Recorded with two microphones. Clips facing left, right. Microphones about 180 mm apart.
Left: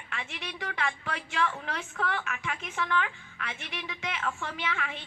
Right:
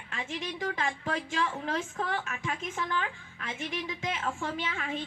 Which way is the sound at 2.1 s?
30° right (ahead or behind).